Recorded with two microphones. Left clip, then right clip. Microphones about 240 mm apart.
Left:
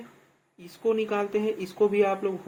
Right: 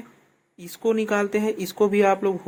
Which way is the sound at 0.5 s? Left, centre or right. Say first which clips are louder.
Right 3 dB; right.